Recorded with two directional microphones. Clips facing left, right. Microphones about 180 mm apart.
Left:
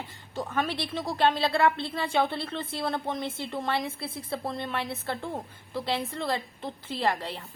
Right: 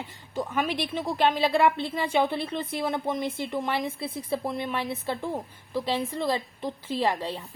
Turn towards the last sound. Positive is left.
turn(degrees=-15)  # may be behind; listen again after turning